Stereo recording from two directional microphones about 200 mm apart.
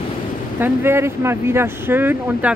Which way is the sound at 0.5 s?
10° right (ahead or behind).